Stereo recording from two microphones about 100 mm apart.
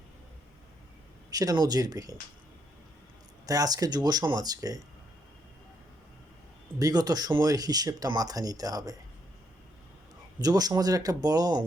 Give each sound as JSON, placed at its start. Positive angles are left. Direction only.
{"t": 1.3, "sound": "speech", "side_deg": -40}
{"t": 3.4, "sound": "speech", "side_deg": -35}
{"t": 6.7, "sound": "speech", "side_deg": -40}
{"t": 10.4, "sound": "speech", "side_deg": -40}